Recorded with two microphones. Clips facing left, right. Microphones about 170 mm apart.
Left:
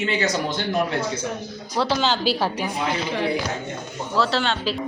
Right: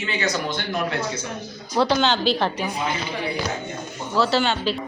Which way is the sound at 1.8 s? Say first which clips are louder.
Right 2 dB; 5° left (ahead or behind).